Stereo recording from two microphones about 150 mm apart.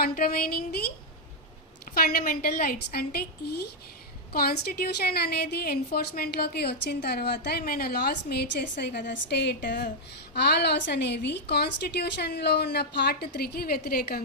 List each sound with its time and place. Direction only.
0.0 s a woman's voice: 85° left
2.0 s a woman's voice: 85° left
10.3 s a woman's voice: 90° left